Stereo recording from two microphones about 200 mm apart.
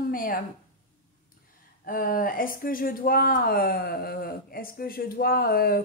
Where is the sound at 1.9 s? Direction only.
45° left (ahead or behind).